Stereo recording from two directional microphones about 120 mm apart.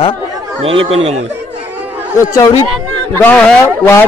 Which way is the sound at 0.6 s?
55° right (ahead or behind).